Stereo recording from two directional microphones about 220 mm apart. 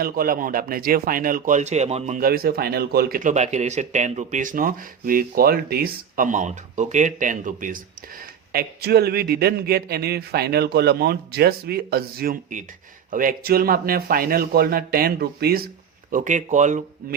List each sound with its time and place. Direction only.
0.0 s a man's voice: 40° right (ahead or behind)